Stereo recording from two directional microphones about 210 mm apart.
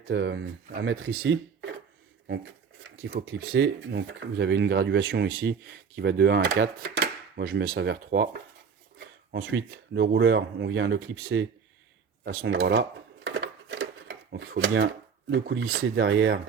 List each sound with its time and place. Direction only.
0.1 s speech: 60° right (ahead or behind)
3.1 s speech: 45° right (ahead or behind); by 11.4 s 70° right (ahead or behind)
12.2 s speech: 55° right (ahead or behind)
13.2 s a sound: 60° right (ahead or behind)
14.3 s speech: 60° right (ahead or behind)